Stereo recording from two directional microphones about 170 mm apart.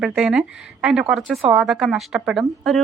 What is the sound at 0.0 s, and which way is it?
A woman's voice, 5° right (ahead or behind).